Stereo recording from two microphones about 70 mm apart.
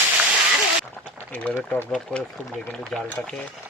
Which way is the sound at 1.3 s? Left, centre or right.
Left.